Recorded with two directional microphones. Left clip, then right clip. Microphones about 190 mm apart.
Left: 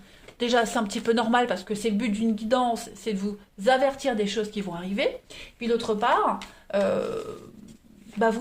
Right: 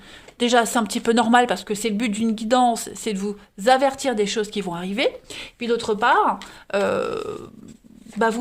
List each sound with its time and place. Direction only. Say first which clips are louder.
0.3 s speech: right 5 dB; 55° right (ahead or behind)